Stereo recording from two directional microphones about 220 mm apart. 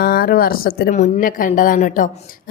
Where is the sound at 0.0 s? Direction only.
45° left (ahead or behind).